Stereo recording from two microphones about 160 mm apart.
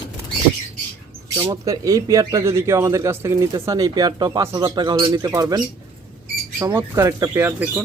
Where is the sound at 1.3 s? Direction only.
20° right (ahead or behind).